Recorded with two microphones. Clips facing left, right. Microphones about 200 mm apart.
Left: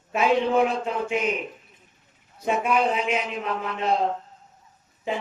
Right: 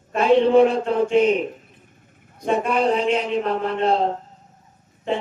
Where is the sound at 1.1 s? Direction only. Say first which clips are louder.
Right 10 dB; 30° right (ahead or behind).